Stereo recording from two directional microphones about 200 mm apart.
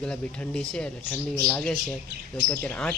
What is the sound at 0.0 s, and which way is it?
Speech, 5° left (ahead or behind).